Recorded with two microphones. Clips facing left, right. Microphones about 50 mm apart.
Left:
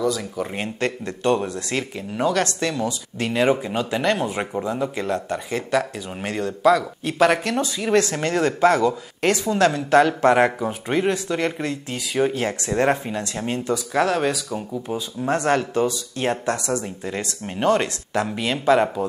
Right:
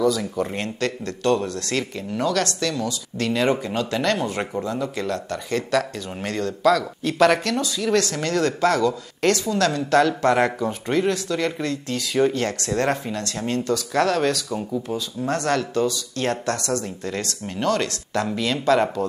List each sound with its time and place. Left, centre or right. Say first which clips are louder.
0.0 s speech: right 2 dB; centre
0.7 s speech: left 1 dB; left
7.5 s speech: left 1 dB; left